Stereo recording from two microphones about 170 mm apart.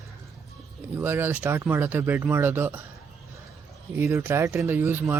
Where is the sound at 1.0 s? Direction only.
15° right (ahead or behind).